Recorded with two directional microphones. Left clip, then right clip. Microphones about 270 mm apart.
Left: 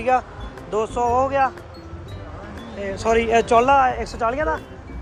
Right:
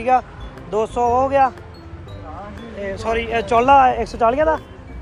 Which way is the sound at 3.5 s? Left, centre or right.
Centre.